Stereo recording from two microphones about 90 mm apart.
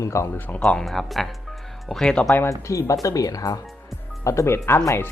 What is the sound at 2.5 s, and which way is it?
Speech, 35° left (ahead or behind).